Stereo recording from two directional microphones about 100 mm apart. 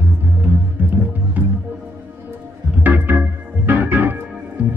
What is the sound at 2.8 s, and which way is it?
Organ, 20° right (ahead or behind).